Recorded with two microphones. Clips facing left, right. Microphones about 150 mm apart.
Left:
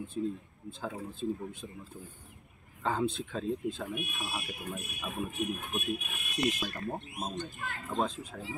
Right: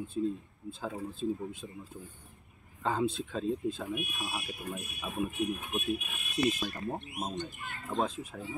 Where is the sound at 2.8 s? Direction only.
5° right (ahead or behind).